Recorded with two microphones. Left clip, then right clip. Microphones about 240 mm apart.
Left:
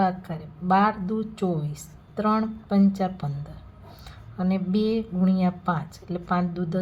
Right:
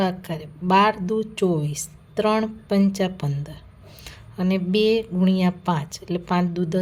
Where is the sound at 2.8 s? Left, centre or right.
Right.